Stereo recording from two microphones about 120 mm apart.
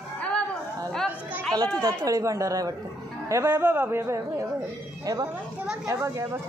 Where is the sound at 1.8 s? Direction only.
25° right (ahead or behind).